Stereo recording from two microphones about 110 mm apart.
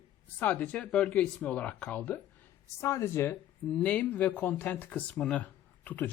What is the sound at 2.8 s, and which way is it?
Speech, 25° left (ahead or behind).